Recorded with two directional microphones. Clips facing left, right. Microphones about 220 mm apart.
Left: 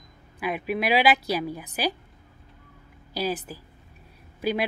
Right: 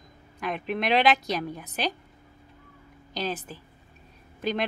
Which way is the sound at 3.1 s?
10° left (ahead or behind).